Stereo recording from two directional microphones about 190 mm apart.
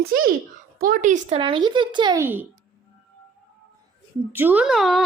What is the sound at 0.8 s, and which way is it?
Speech, 45° right (ahead or behind).